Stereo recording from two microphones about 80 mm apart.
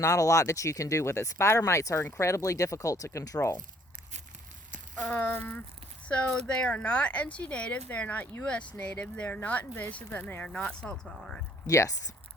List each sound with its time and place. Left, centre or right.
0.0 s speech: left
4.9 s speech: left
6.1 s speech: centre
11.6 s speech: left